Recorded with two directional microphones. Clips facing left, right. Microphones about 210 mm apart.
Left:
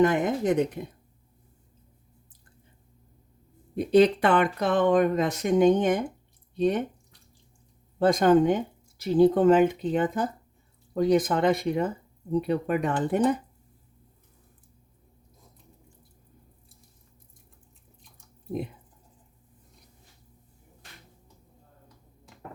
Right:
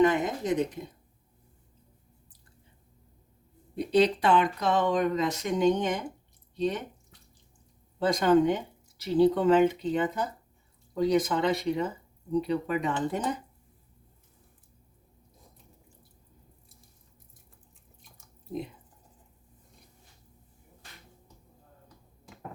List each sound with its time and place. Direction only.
0.0 s speech: 50° left (ahead or behind)
3.8 s speech: 50° left (ahead or behind)
7.9 s speech: 50° left (ahead or behind)